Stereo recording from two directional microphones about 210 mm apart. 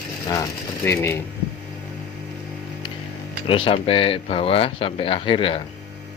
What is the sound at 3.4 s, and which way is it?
Speech, 25° left (ahead or behind).